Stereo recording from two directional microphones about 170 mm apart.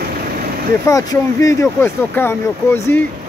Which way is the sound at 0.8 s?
20° left (ahead or behind).